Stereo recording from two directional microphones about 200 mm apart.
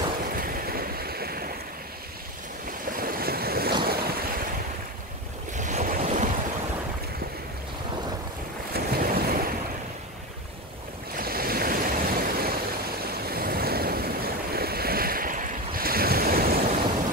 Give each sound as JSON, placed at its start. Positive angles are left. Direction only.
{"t": 0.2, "sound": "waves", "side_deg": -45}
{"t": 2.9, "sound": "waves", "side_deg": -45}
{"t": 5.6, "sound": "waves", "side_deg": -40}
{"t": 8.7, "sound": "waves", "side_deg": -50}
{"t": 11.1, "sound": "waves", "side_deg": -50}